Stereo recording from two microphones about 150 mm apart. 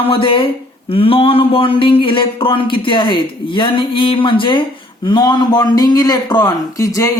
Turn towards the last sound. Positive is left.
turn(degrees=20)  # may be behind; listen again after turning